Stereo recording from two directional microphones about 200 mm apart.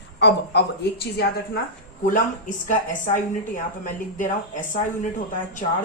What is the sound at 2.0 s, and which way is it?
A woman's voice, 40° left (ahead or behind).